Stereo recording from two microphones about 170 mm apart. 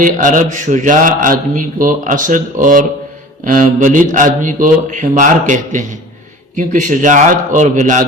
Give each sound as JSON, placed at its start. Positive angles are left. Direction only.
{"t": 0.0, "sound": "a man's voice", "side_deg": -50}